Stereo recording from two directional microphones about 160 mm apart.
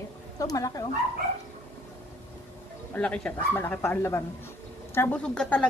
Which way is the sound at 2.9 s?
5° left (ahead or behind).